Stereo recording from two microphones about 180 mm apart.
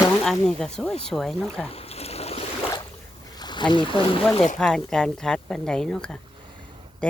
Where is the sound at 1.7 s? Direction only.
35° left (ahead or behind).